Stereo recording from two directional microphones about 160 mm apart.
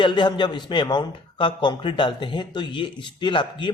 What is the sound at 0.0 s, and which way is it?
A man's voice, 30° left (ahead or behind).